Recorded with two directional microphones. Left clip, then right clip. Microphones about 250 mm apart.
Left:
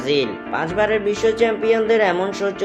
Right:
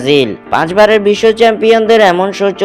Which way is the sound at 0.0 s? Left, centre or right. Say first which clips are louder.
Right 9 dB; right.